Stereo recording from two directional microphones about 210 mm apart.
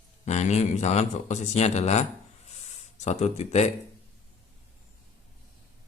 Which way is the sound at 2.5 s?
30° left (ahead or behind).